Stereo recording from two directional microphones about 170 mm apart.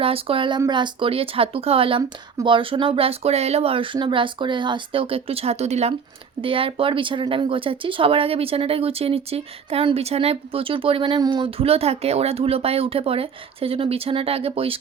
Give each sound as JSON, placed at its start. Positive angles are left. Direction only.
{"t": 0.0, "sound": "speech", "side_deg": -35}